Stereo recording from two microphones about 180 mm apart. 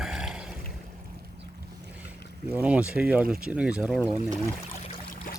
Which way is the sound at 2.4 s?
10° right (ahead or behind).